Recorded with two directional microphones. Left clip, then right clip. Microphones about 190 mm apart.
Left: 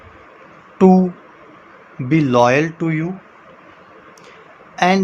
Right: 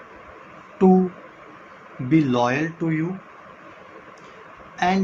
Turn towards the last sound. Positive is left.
turn(degrees=65)  # may be behind; listen again after turning